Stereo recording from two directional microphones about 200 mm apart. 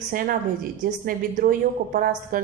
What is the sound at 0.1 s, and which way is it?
A woman's voice, 45° right (ahead or behind).